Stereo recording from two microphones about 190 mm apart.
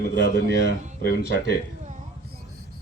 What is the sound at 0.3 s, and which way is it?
Speech, 60° left (ahead or behind).